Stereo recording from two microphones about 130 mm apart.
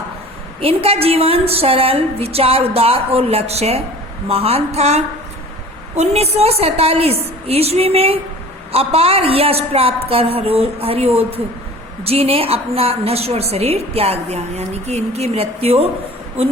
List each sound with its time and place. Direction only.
0.6 s a woman's voice: 45° right (ahead or behind)